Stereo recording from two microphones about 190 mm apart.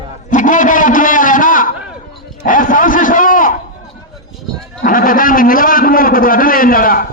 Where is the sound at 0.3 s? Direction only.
45° left (ahead or behind).